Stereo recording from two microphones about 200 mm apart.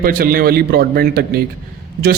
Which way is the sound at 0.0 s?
45° right (ahead or behind).